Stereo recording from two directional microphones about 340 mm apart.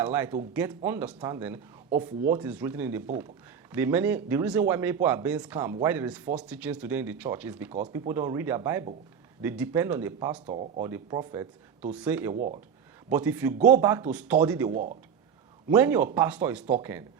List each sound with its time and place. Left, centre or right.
0.0 s speech: centre
10.4 s speech: centre
10.8 s speech: centre
12.3 s speech: right
13.1 s speech: centre